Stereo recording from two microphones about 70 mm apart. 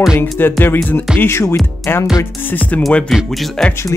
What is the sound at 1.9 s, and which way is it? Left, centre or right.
Speech, left.